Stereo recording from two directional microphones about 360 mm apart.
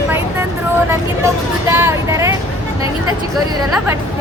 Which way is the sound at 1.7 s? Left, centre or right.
Centre.